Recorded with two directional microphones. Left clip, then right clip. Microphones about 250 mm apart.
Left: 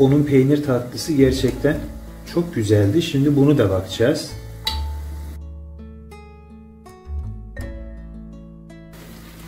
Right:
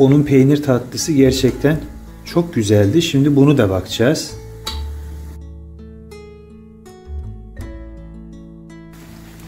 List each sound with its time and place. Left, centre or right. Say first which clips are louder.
0.0 s speech: right 3 dB; right